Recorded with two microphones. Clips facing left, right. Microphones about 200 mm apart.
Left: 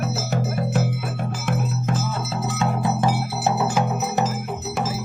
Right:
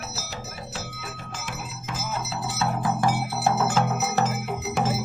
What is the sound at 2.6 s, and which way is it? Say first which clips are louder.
Music: left 2 dB; 20° left (ahead or behind).